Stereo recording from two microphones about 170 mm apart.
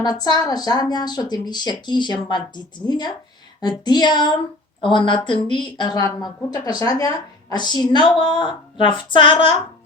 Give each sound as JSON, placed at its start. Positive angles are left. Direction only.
{"t": 0.0, "sound": "speech", "side_deg": 25}